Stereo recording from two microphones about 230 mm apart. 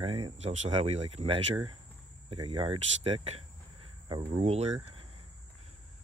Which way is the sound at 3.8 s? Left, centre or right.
Right.